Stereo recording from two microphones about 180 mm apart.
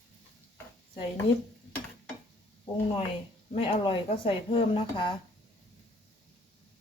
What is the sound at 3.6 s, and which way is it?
Speech, 30° left (ahead or behind).